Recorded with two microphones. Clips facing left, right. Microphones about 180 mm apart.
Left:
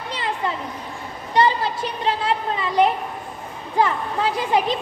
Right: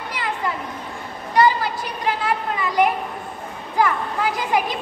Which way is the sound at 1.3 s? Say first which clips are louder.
Right 1 dB; 25° left (ahead or behind).